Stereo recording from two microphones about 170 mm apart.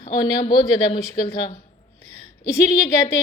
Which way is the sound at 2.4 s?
15° left (ahead or behind).